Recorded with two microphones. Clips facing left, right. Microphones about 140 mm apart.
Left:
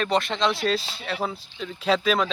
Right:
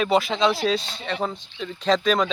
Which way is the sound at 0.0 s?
Centre (ahead or behind).